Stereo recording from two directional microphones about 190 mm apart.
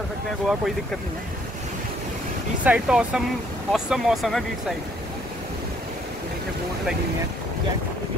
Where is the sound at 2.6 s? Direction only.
5° right (ahead or behind).